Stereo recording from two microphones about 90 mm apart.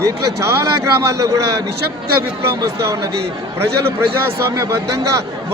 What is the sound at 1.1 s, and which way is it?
A man's voice, 35° right (ahead or behind).